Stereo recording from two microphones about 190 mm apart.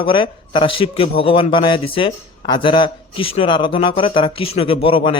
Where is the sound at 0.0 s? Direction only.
25° left (ahead or behind).